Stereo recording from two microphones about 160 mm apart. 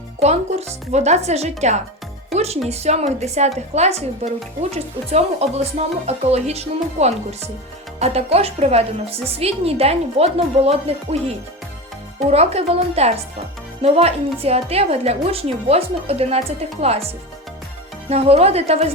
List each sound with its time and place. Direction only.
0.2 s a woman's voice: 40° right (ahead or behind)
18.1 s a woman's voice: 40° right (ahead or behind)